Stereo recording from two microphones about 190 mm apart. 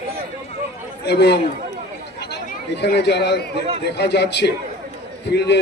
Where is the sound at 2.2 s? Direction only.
60° left (ahead or behind).